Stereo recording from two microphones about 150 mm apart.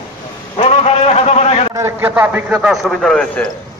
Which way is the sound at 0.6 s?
45° left (ahead or behind).